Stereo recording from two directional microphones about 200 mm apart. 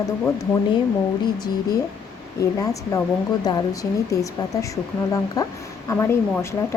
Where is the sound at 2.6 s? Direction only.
15° left (ahead or behind).